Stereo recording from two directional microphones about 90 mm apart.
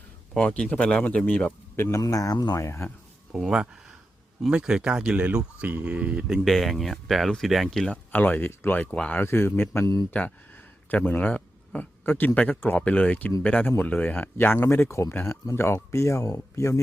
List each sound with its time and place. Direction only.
0.3 s speech: 10° left (ahead or behind)
1.9 s speech: 40° left (ahead or behind)
2.6 s speech: 30° left (ahead or behind)
3.4 s speech: 10° right (ahead or behind)
6.2 s speech: centre (ahead or behind)
8.1 s speech: 20° left (ahead or behind)
9.2 s speech: 25° left (ahead or behind)